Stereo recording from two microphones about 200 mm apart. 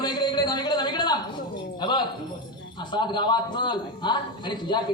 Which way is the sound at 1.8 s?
20° left (ahead or behind).